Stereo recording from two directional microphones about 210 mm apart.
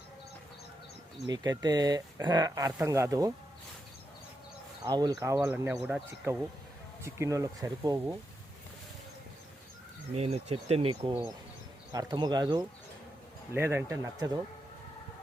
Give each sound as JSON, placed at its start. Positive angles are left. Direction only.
{"t": 1.3, "sound": "speech", "side_deg": -20}
{"t": 4.9, "sound": "speech", "side_deg": -20}
{"t": 10.2, "sound": "speech", "side_deg": -30}